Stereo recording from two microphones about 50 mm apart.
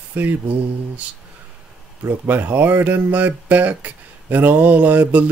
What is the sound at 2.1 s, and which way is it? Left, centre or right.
Speech, right.